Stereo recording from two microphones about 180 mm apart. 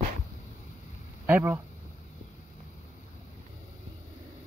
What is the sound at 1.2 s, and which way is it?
Speech, 10° right (ahead or behind).